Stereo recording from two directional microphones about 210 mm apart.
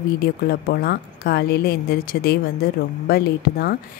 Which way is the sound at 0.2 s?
45° left (ahead or behind).